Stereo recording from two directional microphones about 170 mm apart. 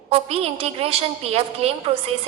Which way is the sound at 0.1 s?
35° right (ahead or behind).